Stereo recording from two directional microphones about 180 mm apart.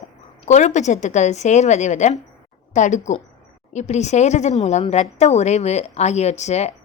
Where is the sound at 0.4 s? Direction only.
40° left (ahead or behind).